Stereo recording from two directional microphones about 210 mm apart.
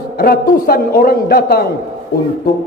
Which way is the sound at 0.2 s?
45° left (ahead or behind).